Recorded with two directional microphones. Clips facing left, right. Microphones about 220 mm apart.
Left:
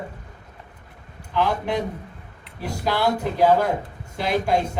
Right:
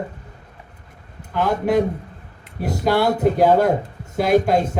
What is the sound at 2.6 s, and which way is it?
A man's voice, 45° right (ahead or behind).